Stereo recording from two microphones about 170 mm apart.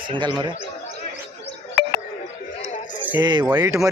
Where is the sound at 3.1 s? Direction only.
25° right (ahead or behind).